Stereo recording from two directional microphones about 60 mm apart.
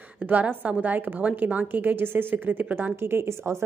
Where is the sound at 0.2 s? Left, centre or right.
Right.